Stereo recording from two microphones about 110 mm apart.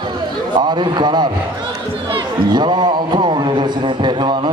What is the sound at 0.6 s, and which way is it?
A man's voice, 40° right (ahead or behind).